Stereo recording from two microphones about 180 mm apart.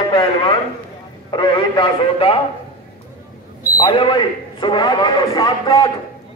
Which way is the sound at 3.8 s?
25° left (ahead or behind).